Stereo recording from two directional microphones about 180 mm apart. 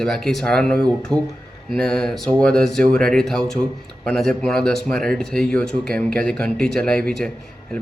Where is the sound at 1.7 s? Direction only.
5° left (ahead or behind).